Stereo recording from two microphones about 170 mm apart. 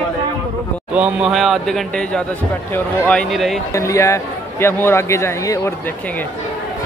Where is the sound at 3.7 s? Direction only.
15° left (ahead or behind).